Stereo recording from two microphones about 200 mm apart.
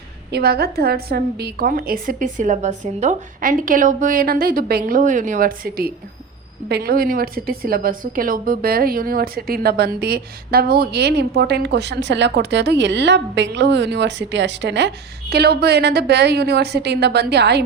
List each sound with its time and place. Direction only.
0.3 s a woman's voice: 55° right (ahead or behind)